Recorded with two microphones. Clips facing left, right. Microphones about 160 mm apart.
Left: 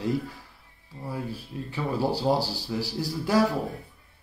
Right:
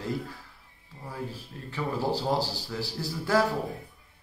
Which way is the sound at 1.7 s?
15° left (ahead or behind).